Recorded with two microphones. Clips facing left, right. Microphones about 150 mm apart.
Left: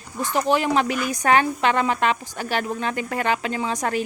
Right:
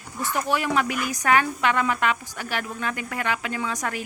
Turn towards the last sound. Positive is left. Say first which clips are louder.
# left 5 dB
turn(degrees=25)  # may be behind; listen again after turning